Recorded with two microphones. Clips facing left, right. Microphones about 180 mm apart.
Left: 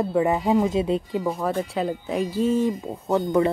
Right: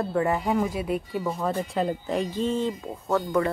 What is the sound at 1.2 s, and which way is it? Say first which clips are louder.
Speech: left 3 dB; 5° left (ahead or behind).